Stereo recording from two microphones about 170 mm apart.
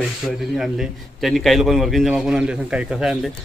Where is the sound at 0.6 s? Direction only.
Centre (ahead or behind).